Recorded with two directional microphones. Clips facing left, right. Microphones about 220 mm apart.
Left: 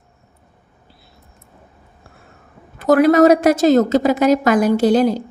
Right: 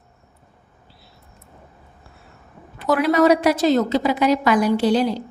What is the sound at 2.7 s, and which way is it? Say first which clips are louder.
A woman's voice: left 6 dB; 45° left (ahead or behind).